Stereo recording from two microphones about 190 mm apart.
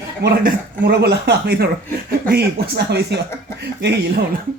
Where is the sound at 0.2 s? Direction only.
60° right (ahead or behind).